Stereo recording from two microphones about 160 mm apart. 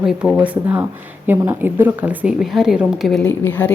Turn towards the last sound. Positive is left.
turn(degrees=10)  # may be behind; listen again after turning